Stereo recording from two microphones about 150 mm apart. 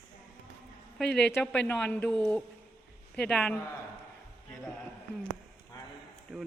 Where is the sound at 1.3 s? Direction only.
10° left (ahead or behind).